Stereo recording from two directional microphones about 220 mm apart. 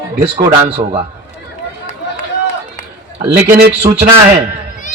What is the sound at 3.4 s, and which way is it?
Speech, 45° right (ahead or behind).